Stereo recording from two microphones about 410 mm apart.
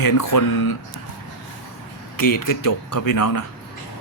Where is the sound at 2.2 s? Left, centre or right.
Left.